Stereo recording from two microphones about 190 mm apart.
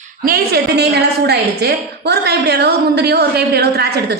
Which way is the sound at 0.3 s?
55° right (ahead or behind).